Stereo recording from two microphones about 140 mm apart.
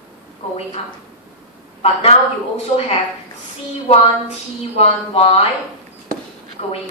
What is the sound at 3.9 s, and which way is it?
A woman's voice, 50° left (ahead or behind).